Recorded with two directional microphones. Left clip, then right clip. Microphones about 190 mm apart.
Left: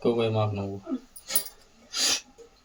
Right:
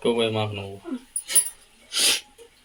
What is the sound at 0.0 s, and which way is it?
Speech, centre (ahead or behind).